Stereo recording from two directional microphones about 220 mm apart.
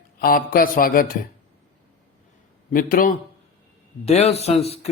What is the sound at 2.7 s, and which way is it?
Speech, 40° left (ahead or behind).